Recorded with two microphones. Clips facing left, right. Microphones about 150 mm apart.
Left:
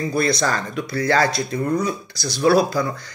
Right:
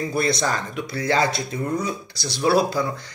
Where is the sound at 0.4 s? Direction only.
15° right (ahead or behind).